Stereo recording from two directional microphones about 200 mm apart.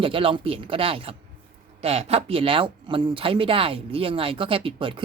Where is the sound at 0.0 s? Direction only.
25° right (ahead or behind).